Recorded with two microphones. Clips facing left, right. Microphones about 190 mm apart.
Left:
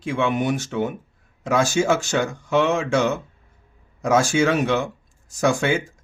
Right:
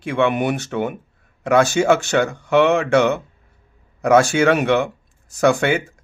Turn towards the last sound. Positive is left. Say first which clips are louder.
# right 4 dB
turn(degrees=-60)  # may be behind; listen again after turning